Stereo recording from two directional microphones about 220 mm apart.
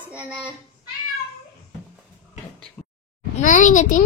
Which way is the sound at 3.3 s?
35° left (ahead or behind).